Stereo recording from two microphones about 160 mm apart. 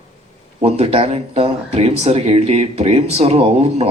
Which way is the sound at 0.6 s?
40° right (ahead or behind).